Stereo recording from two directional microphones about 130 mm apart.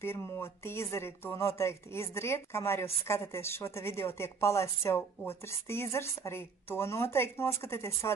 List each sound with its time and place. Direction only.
0.0 s speech: 20° left (ahead or behind)